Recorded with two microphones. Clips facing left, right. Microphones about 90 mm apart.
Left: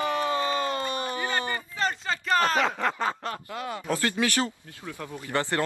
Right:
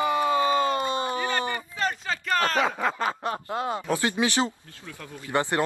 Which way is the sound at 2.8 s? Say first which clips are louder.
Right 1 dB; 10° right (ahead or behind).